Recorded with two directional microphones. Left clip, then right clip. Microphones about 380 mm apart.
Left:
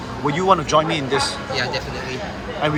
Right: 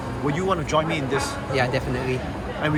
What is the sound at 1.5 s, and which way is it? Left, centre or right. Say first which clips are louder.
Speech: right 2 dB; centre.